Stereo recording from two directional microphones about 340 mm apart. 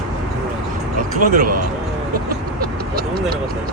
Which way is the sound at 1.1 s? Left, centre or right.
Right.